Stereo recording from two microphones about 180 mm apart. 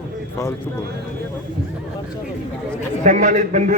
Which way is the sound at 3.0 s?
45° right (ahead or behind).